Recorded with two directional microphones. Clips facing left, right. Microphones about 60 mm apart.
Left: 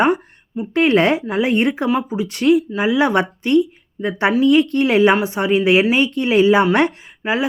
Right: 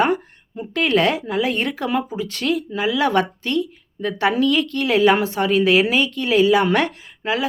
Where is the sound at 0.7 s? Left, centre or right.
Left.